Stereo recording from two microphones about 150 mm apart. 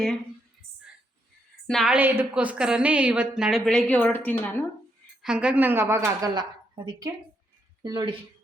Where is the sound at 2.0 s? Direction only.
10° right (ahead or behind); by 4.6 s 10° left (ahead or behind).